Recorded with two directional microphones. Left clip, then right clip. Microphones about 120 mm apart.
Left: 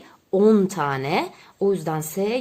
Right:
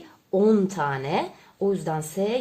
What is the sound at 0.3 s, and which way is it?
Speech, 40° left (ahead or behind).